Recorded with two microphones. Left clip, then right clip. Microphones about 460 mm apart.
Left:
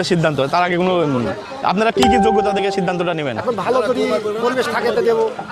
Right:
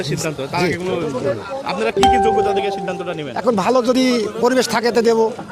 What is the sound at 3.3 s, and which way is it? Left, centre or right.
Speech, right.